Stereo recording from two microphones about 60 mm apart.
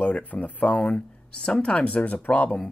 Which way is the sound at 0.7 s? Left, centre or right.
Centre.